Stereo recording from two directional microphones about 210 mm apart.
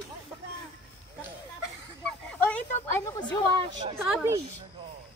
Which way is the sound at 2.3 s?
5° left (ahead or behind).